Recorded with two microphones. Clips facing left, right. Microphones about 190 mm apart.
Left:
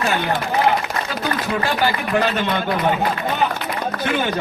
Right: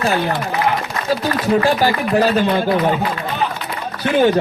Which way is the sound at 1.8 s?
35° right (ahead or behind).